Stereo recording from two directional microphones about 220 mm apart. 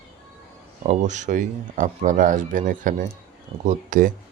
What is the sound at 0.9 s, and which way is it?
Speech, 35° right (ahead or behind).